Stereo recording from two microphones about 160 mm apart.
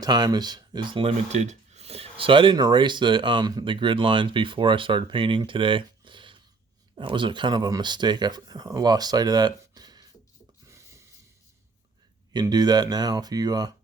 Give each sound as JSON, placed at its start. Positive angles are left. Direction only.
{"t": 0.0, "sound": "speech", "side_deg": -25}
{"t": 12.3, "sound": "speech", "side_deg": -25}